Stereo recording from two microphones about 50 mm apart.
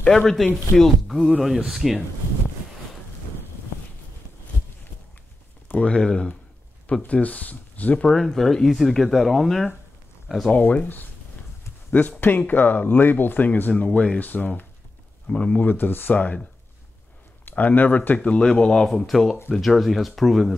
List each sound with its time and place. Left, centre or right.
0.1 s speech: centre
5.9 s speech: centre
7.1 s speech: left
8.1 s speech: centre
10.5 s speech: left
13.8 s speech: centre
14.2 s speech: left
15.6 s speech: left
17.5 s speech: left
18.4 s speech: centre
18.9 s speech: centre